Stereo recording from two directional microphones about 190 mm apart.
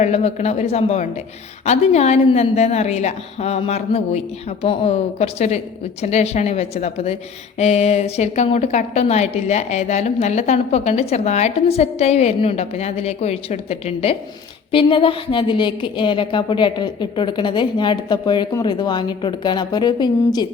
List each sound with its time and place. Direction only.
0.0 s a woman's voice: 35° left (ahead or behind)